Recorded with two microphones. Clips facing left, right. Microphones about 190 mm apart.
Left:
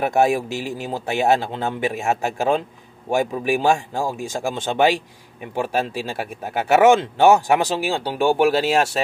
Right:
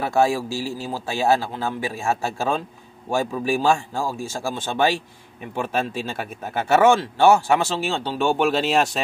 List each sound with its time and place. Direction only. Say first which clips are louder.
0.0 s a man's voice: left 2 dB; 20° left (ahead or behind)